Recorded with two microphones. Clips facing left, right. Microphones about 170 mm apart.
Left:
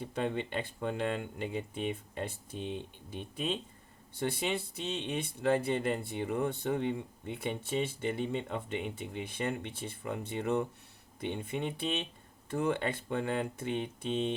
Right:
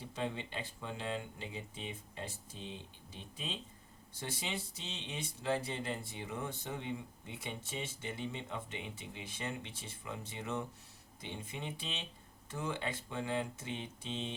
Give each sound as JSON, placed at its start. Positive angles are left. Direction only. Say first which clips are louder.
{"t": 0.0, "sound": "speech", "louder": "left 6 dB", "side_deg": 60}